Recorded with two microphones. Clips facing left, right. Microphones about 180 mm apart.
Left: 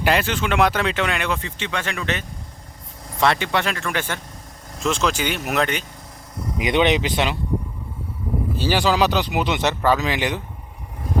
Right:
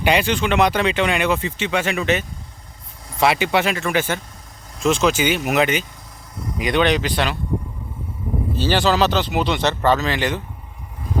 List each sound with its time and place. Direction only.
0.0 s speech: centre (ahead or behind)
6.6 s speech: 20° left (ahead or behind)
8.6 s speech: 10° left (ahead or behind)